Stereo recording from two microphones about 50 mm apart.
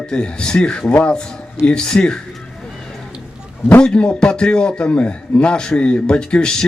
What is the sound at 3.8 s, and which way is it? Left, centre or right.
A man's voice, centre.